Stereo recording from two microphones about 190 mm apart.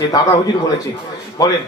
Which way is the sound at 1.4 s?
20° left (ahead or behind).